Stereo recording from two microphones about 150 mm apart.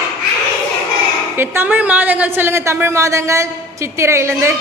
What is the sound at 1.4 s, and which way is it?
A woman's voice, 15° right (ahead or behind).